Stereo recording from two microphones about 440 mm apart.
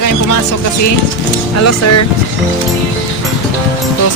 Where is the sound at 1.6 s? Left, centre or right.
Left.